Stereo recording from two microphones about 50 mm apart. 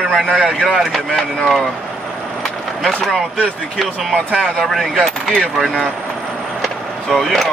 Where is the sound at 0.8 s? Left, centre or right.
Centre.